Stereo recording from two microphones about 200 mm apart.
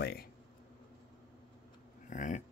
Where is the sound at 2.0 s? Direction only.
40° left (ahead or behind).